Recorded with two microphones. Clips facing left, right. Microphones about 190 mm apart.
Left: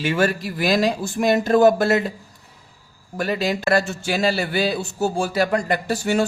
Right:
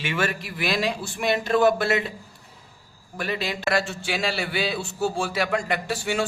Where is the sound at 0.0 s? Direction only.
40° left (ahead or behind).